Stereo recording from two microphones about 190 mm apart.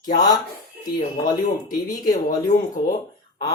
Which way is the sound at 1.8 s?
45° left (ahead or behind).